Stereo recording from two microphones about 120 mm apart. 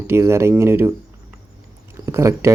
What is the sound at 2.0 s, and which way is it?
Speech, 25° right (ahead or behind).